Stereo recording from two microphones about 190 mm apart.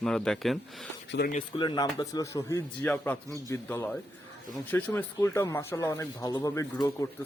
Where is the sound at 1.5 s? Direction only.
25° left (ahead or behind).